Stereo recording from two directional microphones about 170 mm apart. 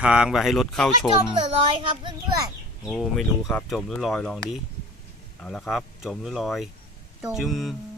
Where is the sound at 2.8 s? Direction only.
Centre (ahead or behind).